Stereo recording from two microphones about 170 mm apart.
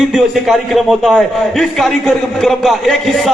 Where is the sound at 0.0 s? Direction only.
Centre (ahead or behind).